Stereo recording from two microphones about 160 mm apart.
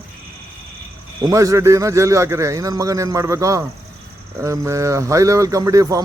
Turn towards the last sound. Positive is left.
turn(degrees=-20)  # may be behind; listen again after turning